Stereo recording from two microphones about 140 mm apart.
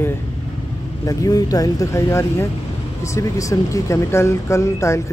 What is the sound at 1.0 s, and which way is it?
Speech, 25° left (ahead or behind).